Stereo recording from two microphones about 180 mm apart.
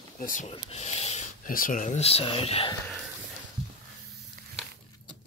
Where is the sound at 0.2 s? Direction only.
45° left (ahead or behind).